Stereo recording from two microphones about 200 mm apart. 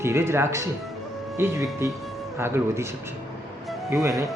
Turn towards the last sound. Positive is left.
turn(degrees=-15)  # may be behind; listen again after turning